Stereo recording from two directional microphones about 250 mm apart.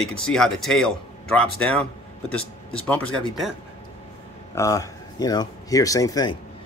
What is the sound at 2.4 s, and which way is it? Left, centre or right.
Speech, left.